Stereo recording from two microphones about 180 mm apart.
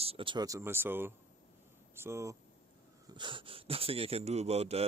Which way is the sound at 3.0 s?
25° right (ahead or behind).